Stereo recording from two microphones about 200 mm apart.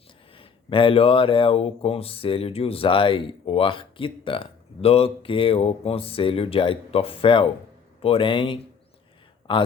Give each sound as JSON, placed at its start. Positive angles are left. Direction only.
{"t": 0.3, "sound": "speech", "side_deg": 25}